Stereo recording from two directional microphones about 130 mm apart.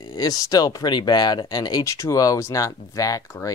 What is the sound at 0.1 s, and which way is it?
Speech, 30° left (ahead or behind).